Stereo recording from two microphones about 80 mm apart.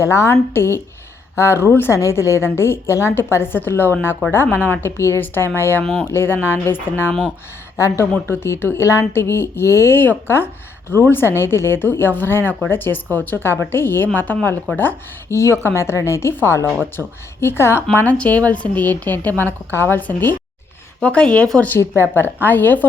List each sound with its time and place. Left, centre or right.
0.0 s a woman's voice: left
5.8 s speech: centre
6.1 s speech: left
7.8 s a woman's voice: left
8.3 s a woman's voice: left
17.9 s a woman's voice: centre
22.0 s speech: left